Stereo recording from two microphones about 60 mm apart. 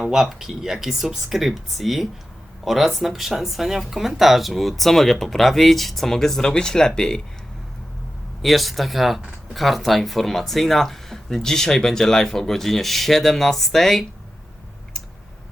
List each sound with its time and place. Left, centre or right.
0.0 s speech: centre
8.4 s speech: centre